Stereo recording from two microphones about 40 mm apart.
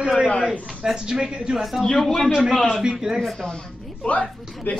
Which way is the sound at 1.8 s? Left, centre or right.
Centre.